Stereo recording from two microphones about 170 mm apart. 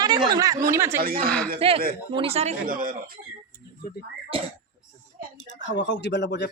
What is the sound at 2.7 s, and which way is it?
Speech, 50° right (ahead or behind).